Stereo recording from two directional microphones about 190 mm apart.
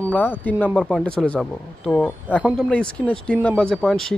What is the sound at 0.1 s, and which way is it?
Speech, 10° left (ahead or behind).